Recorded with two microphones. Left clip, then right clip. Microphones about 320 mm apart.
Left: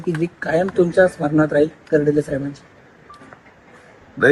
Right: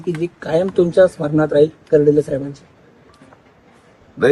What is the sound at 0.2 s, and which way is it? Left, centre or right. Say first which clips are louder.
Speech: right 1 dB; right.